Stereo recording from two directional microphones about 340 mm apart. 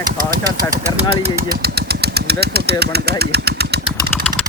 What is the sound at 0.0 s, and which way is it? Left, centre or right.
Speech, right.